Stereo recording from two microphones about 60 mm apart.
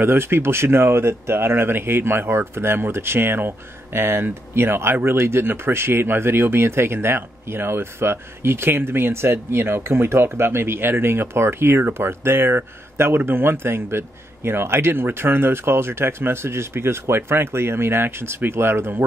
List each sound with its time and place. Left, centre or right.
0.0 s speech: right